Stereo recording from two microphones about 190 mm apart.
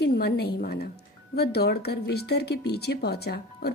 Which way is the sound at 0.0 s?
60° left (ahead or behind).